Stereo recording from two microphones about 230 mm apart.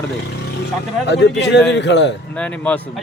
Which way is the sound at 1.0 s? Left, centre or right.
Left.